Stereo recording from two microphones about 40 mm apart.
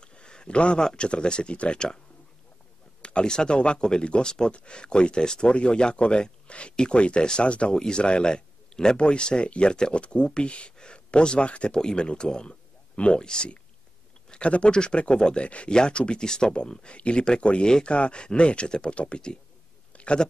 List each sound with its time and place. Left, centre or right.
0.0 s a sound: left
0.8 s speech: left
3.0 s speech: left
7.7 s speech: centre